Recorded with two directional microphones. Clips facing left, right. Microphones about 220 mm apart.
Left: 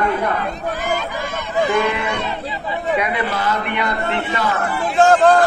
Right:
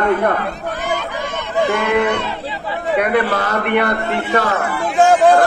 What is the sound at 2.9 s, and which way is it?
A man's voice, 60° right (ahead or behind).